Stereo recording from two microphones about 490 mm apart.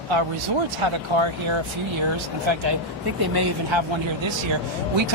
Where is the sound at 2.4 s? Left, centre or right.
Right.